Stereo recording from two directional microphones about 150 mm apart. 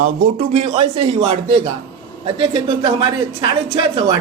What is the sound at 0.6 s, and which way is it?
Speech, 45° right (ahead or behind).